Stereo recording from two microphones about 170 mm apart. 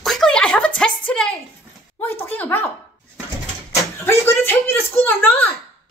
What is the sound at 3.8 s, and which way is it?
Door, 15° left (ahead or behind).